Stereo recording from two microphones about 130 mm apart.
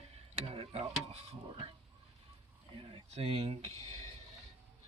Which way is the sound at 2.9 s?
50° right (ahead or behind).